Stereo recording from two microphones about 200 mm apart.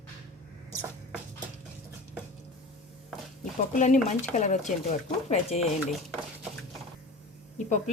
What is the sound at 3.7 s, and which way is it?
Speech, 35° left (ahead or behind).